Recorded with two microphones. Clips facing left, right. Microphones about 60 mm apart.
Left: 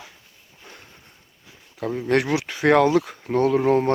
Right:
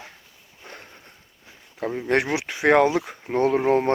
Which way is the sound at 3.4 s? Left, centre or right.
Right.